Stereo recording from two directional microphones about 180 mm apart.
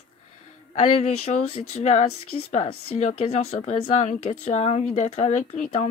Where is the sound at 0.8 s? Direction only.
35° left (ahead or behind).